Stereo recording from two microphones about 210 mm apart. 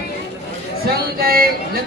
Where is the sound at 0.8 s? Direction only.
45° right (ahead or behind).